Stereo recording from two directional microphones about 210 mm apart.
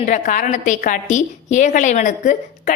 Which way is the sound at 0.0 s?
40° left (ahead or behind).